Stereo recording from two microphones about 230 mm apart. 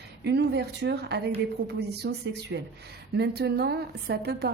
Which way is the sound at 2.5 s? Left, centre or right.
Right.